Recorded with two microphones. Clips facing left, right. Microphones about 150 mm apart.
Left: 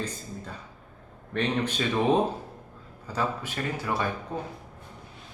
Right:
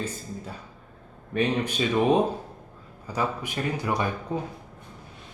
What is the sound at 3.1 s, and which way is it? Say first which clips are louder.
A man's voice: right 1 dB; 15° right (ahead or behind).